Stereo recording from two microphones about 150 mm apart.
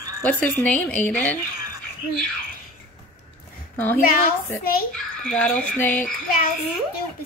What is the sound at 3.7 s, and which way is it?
Speech, 15° left (ahead or behind).